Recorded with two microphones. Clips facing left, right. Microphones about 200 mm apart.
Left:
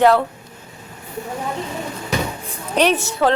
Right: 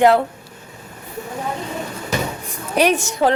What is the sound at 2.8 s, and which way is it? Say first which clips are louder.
Speech: even; 15° right (ahead or behind).